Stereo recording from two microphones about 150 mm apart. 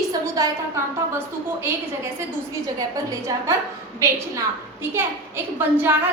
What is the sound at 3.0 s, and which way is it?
Speech, 20° right (ahead or behind).